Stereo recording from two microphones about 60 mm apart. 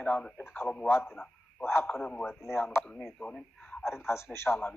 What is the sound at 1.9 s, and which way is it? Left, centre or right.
Speech, centre.